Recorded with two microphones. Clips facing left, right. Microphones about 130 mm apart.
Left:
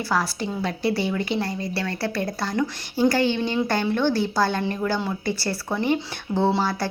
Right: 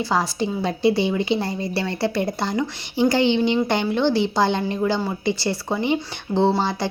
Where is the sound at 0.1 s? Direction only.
25° right (ahead or behind).